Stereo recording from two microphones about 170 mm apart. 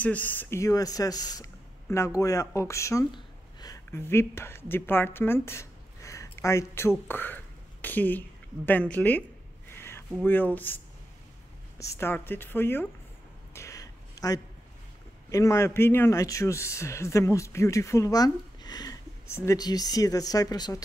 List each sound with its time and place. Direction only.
0.0 s a man's voice: 10° left (ahead or behind)
9.8 s a sound: 15° left (ahead or behind)
10.2 s a man's voice: 10° left (ahead or behind)
11.8 s a man's voice: 15° left (ahead or behind)
13.5 s a sound: 15° left (ahead or behind)
15.2 s a man's voice: 20° left (ahead or behind)